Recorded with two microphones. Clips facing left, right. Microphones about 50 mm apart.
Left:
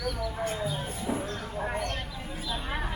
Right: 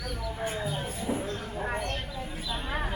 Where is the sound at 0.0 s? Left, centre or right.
Centre.